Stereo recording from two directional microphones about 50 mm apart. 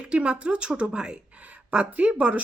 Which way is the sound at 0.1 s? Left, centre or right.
Right.